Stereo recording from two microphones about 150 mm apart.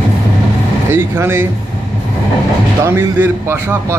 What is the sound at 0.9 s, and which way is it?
Speech, 15° right (ahead or behind).